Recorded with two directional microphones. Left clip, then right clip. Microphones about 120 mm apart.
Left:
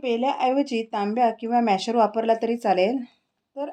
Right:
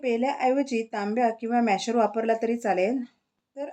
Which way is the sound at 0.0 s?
30° left (ahead or behind).